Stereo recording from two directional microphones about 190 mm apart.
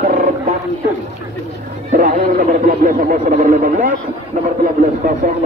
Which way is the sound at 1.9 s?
45° right (ahead or behind).